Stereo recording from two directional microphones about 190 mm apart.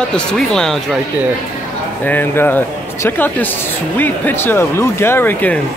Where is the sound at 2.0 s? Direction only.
10° left (ahead or behind).